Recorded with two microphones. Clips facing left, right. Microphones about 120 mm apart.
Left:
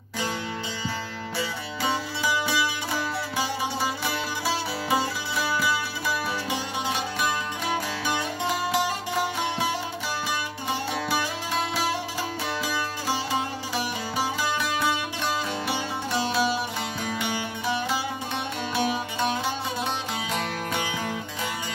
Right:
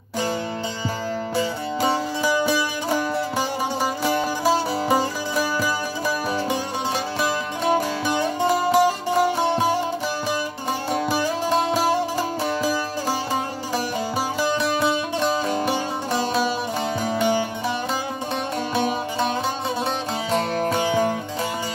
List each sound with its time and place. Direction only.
1.3 s music: 45° right (ahead or behind)
7.6 s music: 40° right (ahead or behind)
10.9 s music: 40° right (ahead or behind)
14.4 s music: 30° right (ahead or behind)
15.5 s music: 45° right (ahead or behind)
18.8 s music: 35° right (ahead or behind)